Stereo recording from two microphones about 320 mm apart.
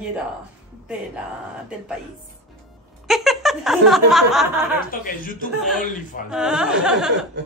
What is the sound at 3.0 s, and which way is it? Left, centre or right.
Speech, centre.